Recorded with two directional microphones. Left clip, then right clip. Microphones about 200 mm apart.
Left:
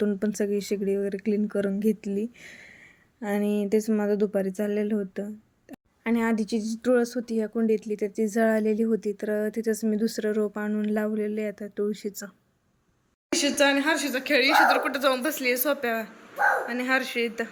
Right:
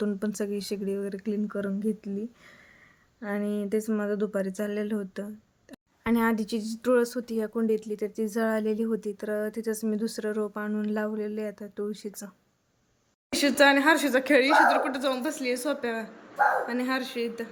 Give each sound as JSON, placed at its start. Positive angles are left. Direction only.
{"t": 0.0, "sound": "speech", "side_deg": 10}
{"t": 13.3, "sound": "speech", "side_deg": -15}